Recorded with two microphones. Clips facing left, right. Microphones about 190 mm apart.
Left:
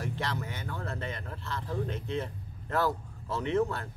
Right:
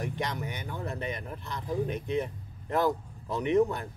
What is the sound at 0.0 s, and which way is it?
Speech, 15° right (ahead or behind).